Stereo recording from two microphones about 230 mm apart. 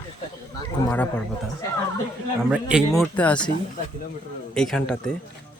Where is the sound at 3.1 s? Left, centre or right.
Centre.